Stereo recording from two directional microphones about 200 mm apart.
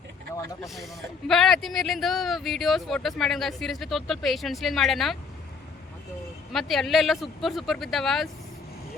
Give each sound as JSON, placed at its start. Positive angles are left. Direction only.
{"t": 1.3, "sound": "speech", "side_deg": 0}
{"t": 6.5, "sound": "speech", "side_deg": 0}